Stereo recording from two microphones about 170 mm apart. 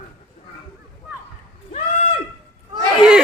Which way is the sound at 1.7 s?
40° left (ahead or behind).